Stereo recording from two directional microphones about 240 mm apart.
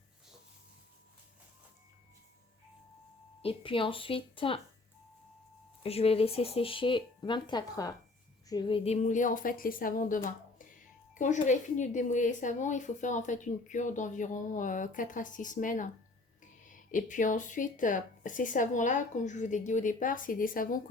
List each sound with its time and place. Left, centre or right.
3.4 s speech: left
5.8 s speech: left